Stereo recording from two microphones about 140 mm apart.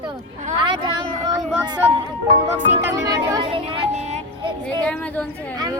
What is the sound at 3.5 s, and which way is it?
Speech, 40° right (ahead or behind).